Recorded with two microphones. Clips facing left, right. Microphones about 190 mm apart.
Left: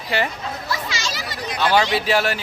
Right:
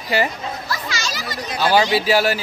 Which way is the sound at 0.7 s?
25° left (ahead or behind).